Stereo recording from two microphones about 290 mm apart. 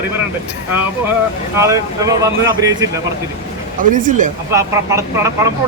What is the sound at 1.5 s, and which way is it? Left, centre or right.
Speech, centre.